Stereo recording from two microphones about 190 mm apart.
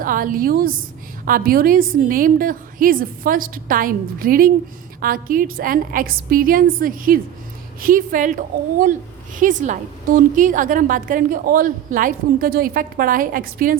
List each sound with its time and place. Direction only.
0.0 s a woman's voice: 50° right (ahead or behind)